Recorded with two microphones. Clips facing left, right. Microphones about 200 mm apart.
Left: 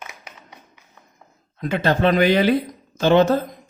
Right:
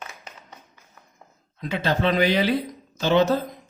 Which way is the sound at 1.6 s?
50° left (ahead or behind).